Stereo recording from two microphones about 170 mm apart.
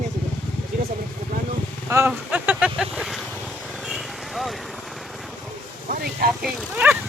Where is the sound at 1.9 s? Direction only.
15° right (ahead or behind).